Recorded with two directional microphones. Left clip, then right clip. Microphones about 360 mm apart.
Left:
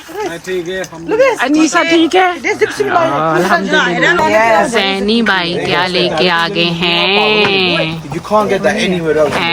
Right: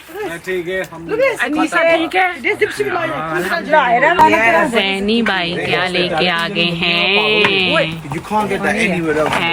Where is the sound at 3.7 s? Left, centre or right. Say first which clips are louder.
Even; centre.